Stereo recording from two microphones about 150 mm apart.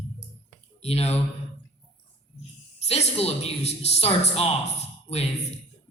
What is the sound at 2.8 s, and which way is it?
Speech, 45° left (ahead or behind).